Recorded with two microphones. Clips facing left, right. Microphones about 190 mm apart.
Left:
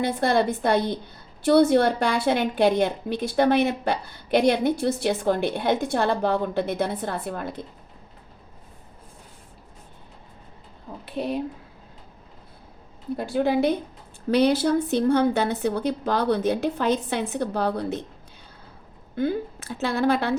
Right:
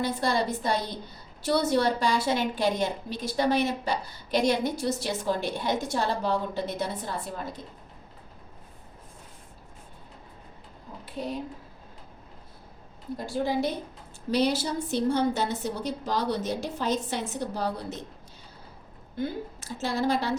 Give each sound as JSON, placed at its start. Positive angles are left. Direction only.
{"t": 0.0, "sound": "a woman's voice", "side_deg": 60}
{"t": 11.0, "sound": "speech", "side_deg": 65}
{"t": 13.1, "sound": "a woman's voice", "side_deg": 60}
{"t": 19.1, "sound": "a woman's voice", "side_deg": 60}